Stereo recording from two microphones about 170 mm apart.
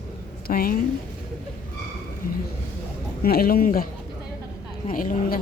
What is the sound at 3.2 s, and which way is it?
Speech, 60° left (ahead or behind).